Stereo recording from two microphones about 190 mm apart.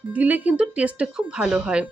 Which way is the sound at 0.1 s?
10° right (ahead or behind).